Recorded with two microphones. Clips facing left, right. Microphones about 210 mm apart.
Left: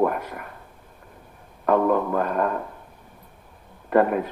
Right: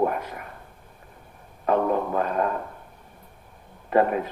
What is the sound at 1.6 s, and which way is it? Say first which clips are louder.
Speech: left 3 dB; 50° left (ahead or behind).